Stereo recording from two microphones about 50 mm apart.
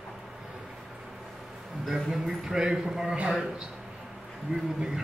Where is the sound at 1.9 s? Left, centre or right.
Centre.